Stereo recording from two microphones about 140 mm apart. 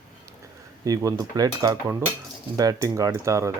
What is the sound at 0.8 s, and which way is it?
Speech, 25° right (ahead or behind).